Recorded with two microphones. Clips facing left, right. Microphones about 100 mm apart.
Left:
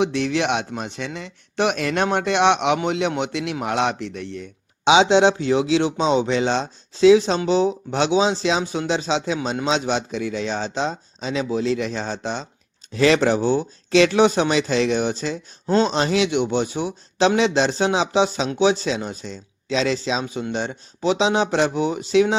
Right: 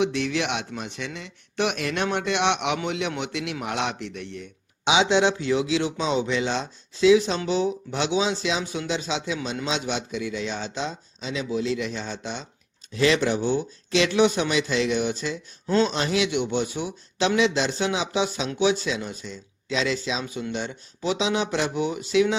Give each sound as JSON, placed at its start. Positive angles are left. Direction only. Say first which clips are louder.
{"t": 0.0, "sound": "speech", "louder": "left 4 dB", "side_deg": 30}